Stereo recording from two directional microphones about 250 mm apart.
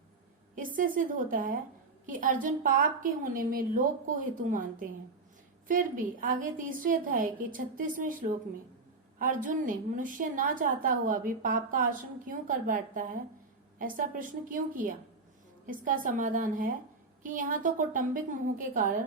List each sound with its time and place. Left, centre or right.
0.5 s a woman's voice: right